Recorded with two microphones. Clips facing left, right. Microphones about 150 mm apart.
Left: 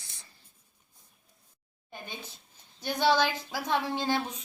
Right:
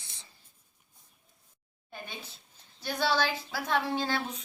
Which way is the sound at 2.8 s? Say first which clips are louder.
Left 3 dB; 15° left (ahead or behind).